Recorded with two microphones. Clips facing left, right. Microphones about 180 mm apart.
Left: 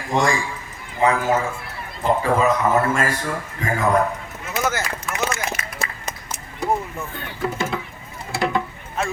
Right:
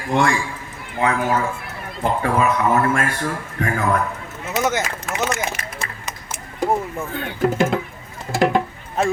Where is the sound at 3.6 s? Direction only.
60° right (ahead or behind).